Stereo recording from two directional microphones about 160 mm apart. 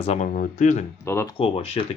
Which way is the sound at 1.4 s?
40° left (ahead or behind).